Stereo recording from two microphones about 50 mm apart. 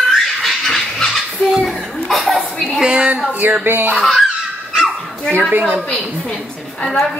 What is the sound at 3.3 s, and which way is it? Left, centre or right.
Speech, right.